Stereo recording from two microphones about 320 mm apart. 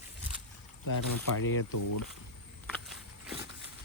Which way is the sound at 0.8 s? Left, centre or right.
Left.